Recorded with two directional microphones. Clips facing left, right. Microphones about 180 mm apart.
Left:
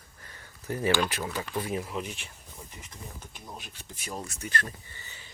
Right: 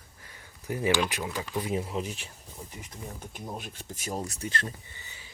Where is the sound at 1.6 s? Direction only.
25° right (ahead or behind).